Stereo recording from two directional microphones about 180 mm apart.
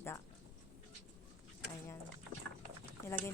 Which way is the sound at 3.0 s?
15° left (ahead or behind).